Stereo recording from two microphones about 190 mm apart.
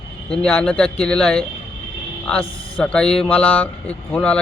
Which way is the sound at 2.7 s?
5° left (ahead or behind).